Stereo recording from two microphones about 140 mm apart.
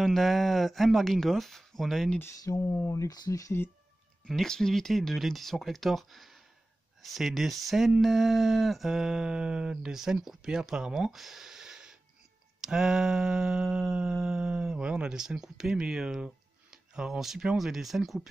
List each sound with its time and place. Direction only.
0.0 s speech: centre (ahead or behind)
2.1 s speech: 20° left (ahead or behind)
4.3 s speech: centre (ahead or behind)